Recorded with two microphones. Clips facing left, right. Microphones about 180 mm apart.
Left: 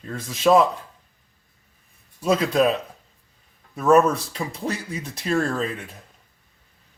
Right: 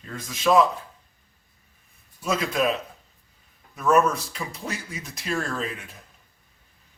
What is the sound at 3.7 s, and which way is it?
Speech, 35° left (ahead or behind).